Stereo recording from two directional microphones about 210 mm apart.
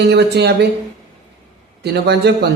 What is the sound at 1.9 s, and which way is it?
Speech, 50° right (ahead or behind).